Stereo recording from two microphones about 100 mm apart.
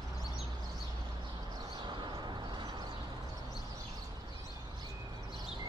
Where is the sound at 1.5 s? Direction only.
50° right (ahead or behind).